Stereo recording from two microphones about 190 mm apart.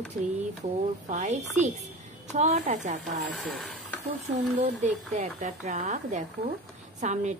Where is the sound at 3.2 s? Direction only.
Centre (ahead or behind).